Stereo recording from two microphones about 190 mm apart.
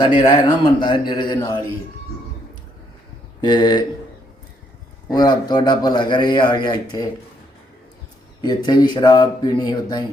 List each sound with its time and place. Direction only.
0.0 s speech: 25° left (ahead or behind)
3.4 s speech: 20° left (ahead or behind)
5.1 s speech: 20° left (ahead or behind)
8.4 s speech: 20° left (ahead or behind)